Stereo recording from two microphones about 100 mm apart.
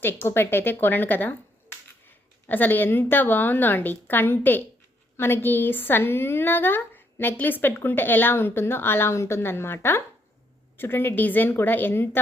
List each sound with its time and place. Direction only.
0.0 s a woman's voice: 20° left (ahead or behind)